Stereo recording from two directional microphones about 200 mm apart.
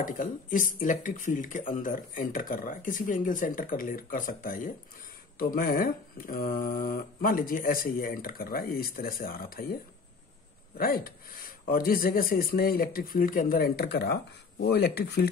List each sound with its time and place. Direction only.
0.0 s speech: 40° left (ahead or behind)
10.8 s speech: 45° left (ahead or behind)